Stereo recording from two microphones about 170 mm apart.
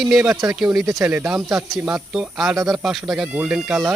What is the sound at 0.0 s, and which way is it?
Speech, 5° right (ahead or behind).